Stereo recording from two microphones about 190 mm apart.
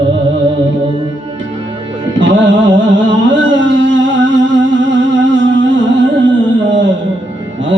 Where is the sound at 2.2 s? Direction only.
75° right (ahead or behind).